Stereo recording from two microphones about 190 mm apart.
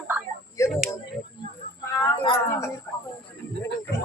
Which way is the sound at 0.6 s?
15° left (ahead or behind).